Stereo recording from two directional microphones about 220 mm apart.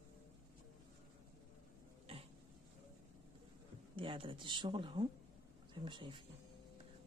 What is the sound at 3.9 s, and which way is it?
Speech, 25° right (ahead or behind).